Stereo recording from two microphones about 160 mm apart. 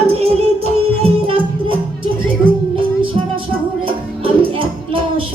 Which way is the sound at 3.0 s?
35° right (ahead or behind).